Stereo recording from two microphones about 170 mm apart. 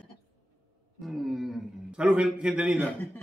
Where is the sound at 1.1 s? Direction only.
Centre (ahead or behind).